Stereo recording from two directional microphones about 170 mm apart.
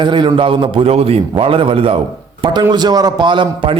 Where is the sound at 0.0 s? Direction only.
25° right (ahead or behind).